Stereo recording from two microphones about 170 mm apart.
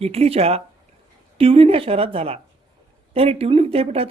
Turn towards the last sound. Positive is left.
turn(degrees=-35)  # may be behind; listen again after turning